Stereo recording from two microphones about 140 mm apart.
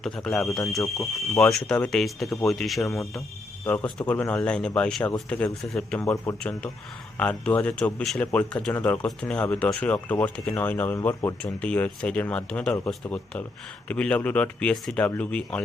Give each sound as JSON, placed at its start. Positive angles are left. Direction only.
{"t": 0.0, "sound": "speech", "side_deg": 0}
{"t": 0.8, "sound": "speech", "side_deg": 20}
{"t": 1.5, "sound": "speech", "side_deg": 5}
{"t": 11.6, "sound": "speech", "side_deg": 10}